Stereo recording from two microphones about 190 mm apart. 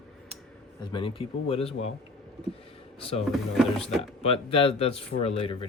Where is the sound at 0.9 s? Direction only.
25° left (ahead or behind).